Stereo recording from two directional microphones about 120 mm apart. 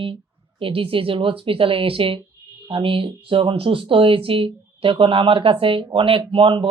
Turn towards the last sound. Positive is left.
turn(degrees=-45)  # may be behind; listen again after turning